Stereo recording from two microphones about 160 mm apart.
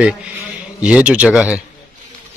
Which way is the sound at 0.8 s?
5° right (ahead or behind).